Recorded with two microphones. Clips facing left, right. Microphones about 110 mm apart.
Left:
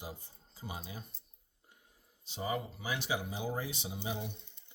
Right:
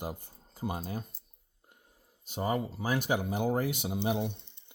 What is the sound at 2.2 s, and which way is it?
Speech, 50° right (ahead or behind).